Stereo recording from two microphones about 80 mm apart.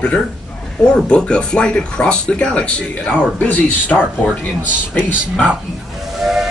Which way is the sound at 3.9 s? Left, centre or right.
Centre.